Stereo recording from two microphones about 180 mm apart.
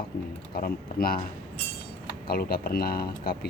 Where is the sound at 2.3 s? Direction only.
55° left (ahead or behind).